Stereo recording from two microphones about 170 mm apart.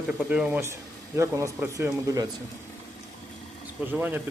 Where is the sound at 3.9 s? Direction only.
10° right (ahead or behind).